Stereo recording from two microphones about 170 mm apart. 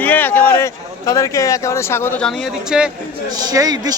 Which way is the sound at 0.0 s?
10° left (ahead or behind).